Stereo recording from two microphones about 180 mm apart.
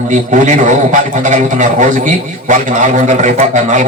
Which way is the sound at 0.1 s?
45° right (ahead or behind).